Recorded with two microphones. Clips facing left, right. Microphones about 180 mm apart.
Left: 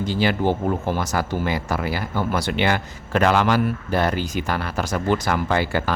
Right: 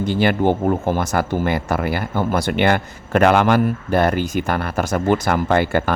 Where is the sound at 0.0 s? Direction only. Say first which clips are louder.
Right 4 dB; 55° right (ahead or behind).